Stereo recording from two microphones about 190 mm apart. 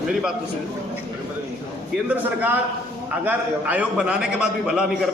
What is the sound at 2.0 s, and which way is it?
A man's voice, 10° right (ahead or behind).